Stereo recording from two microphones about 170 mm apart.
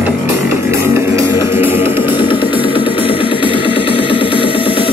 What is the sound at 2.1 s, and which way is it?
Music, 30° left (ahead or behind).